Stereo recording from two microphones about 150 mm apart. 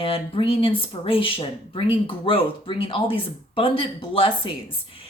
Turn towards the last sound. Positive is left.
turn(degrees=35)  # may be behind; listen again after turning